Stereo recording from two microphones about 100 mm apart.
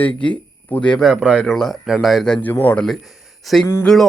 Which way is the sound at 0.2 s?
15° left (ahead or behind).